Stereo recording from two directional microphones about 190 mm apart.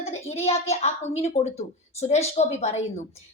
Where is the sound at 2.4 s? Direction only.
35° left (ahead or behind).